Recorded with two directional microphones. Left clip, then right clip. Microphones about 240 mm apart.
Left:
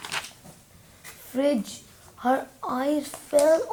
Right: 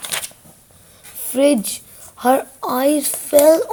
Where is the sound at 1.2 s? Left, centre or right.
Right.